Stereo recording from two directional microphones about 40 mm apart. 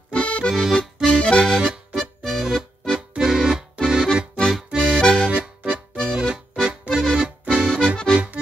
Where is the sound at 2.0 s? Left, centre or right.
Centre.